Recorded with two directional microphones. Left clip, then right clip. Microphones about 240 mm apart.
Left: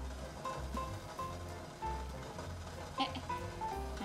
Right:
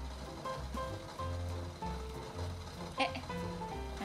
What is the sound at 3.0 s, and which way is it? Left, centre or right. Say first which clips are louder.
Music: right 3 dB; right.